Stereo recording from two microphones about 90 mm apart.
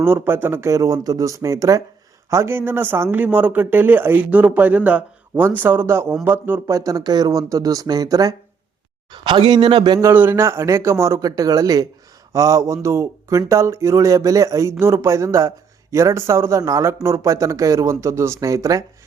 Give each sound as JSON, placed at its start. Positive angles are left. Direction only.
{"t": 0.0, "sound": "a man's voice", "side_deg": -25}
{"t": 6.7, "sound": "speech", "side_deg": -40}
{"t": 9.1, "sound": "a man's voice", "side_deg": -60}
{"t": 10.2, "sound": "speech", "side_deg": -25}